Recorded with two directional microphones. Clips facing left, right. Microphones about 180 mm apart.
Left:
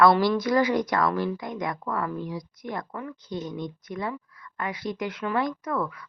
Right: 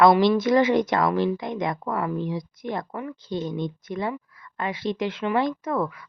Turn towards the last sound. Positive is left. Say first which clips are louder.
# right 3 dB
turn(degrees=-25)  # may be behind; listen again after turning